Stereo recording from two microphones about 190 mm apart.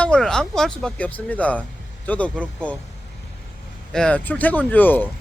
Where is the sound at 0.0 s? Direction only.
5° left (ahead or behind).